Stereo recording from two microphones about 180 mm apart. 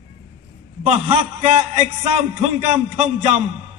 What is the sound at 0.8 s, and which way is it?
A man's voice, 40° right (ahead or behind).